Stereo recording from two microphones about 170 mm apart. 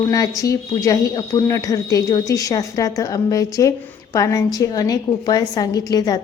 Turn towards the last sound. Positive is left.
turn(degrees=20)  # may be behind; listen again after turning